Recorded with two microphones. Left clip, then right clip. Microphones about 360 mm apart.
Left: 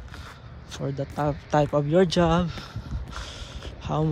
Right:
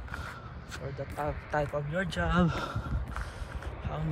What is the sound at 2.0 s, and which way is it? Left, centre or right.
Speech, centre.